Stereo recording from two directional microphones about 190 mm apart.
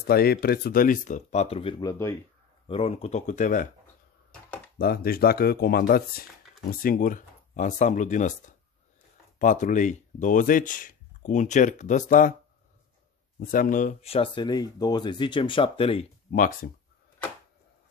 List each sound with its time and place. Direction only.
0.0 s speech: 55° left (ahead or behind); by 2.1 s 15° left (ahead or behind)
2.7 s speech: 30° left (ahead or behind)
4.7 s speech: 55° left (ahead or behind)
13.4 s speech: 45° left (ahead or behind)
14.1 s speech: 25° left (ahead or behind)
16.3 s speech: 45° left (ahead or behind)